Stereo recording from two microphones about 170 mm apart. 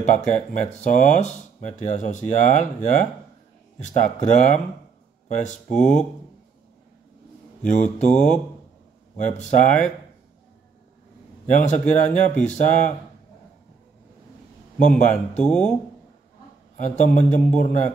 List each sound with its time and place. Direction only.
0.0 s speech: 45° left (ahead or behind)
7.6 s speech: 45° left (ahead or behind)
9.1 s speech: 45° left (ahead or behind)
11.4 s speech: 45° left (ahead or behind)
15.0 s speech: 45° left (ahead or behind)
15.4 s speech: 5° left (ahead or behind)
16.8 s speech: 45° left (ahead or behind)